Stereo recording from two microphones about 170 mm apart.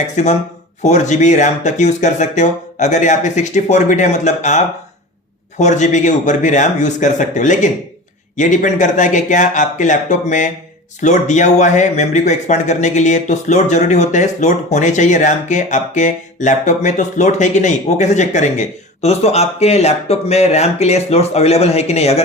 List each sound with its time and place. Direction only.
0.2 s speech: 45° left (ahead or behind)